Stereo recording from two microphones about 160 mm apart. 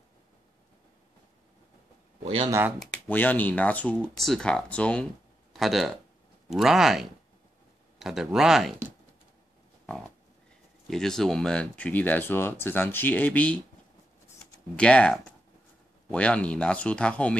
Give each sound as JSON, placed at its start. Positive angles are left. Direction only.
{"t": 2.2, "sound": "speech", "side_deg": -35}
{"t": 2.8, "sound": "speech", "side_deg": 10}
{"t": 10.9, "sound": "speech", "side_deg": 5}
{"t": 14.8, "sound": "speech", "side_deg": 5}